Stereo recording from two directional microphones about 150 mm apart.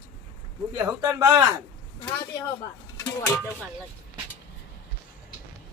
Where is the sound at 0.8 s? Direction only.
20° right (ahead or behind).